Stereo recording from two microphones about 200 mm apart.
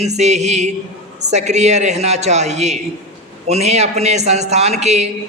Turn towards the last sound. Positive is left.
turn(degrees=-35)  # may be behind; listen again after turning